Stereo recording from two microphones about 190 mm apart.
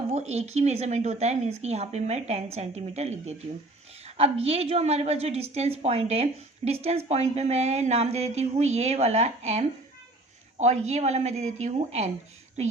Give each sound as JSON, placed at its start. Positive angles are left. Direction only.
{"t": 0.1, "sound": "speech", "side_deg": -35}